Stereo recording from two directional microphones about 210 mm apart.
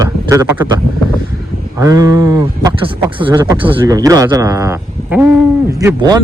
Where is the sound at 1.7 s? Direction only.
15° right (ahead or behind).